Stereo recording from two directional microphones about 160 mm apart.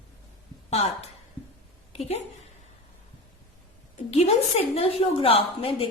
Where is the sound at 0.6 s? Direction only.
40° left (ahead or behind).